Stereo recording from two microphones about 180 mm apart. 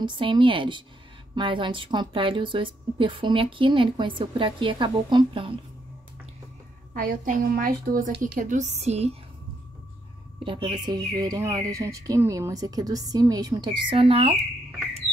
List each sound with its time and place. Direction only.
0.0 s a woman's voice: 25° right (ahead or behind)
6.9 s a woman's voice: 50° right (ahead or behind)
10.4 s a woman's voice: 30° right (ahead or behind)